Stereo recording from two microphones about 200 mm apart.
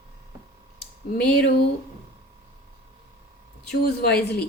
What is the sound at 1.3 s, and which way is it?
Speech, 55° left (ahead or behind).